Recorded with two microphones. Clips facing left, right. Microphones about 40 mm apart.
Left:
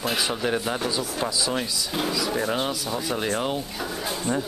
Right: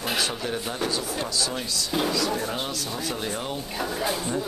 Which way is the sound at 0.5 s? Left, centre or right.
Centre.